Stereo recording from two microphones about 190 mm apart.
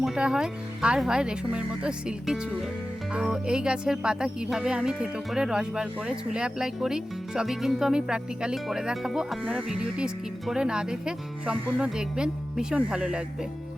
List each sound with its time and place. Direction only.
0.0 s speech: centre (ahead or behind)